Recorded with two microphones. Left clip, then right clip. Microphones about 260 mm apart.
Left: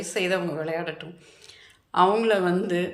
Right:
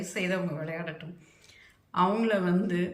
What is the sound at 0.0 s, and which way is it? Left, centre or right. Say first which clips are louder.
A woman's voice: left 6 dB; centre.